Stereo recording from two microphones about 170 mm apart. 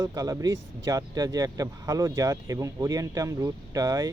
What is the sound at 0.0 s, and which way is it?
Speech, 20° right (ahead or behind).